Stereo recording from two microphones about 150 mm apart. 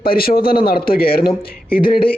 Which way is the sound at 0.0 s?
85° left.